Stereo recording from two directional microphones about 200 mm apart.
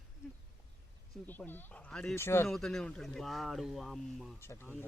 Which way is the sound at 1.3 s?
10° left (ahead or behind).